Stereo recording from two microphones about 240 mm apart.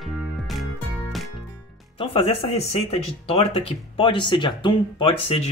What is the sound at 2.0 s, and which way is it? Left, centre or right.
Speech, left.